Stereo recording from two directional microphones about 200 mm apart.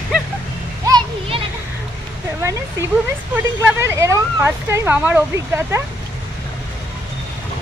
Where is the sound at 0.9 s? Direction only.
20° right (ahead or behind).